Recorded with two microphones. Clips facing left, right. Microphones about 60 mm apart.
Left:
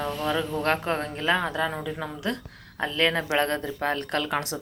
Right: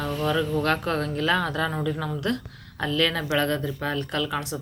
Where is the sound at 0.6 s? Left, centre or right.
Left.